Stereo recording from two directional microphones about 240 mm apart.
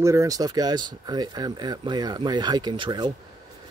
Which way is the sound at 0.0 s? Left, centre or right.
Centre.